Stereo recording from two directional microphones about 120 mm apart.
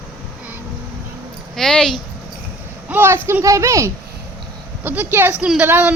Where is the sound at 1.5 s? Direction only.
5° left (ahead or behind).